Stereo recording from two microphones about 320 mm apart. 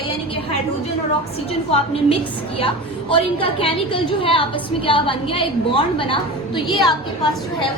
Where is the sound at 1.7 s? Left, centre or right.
Centre.